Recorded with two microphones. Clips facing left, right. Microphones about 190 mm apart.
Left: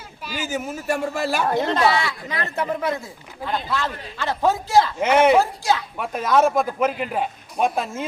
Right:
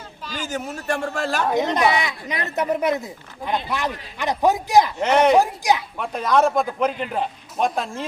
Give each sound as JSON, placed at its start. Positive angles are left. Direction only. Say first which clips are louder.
{"t": 0.3, "sound": "speech", "louder": "left 1 dB", "side_deg": 10}
{"t": 1.5, "sound": "speech", "louder": "right 1 dB", "side_deg": -15}
{"t": 4.9, "sound": "a man's voice", "louder": "even", "side_deg": 5}
{"t": 5.4, "sound": "speech", "louder": "right 1 dB", "side_deg": -15}
{"t": 6.0, "sound": "a man's voice", "louder": "left 3 dB", "side_deg": 5}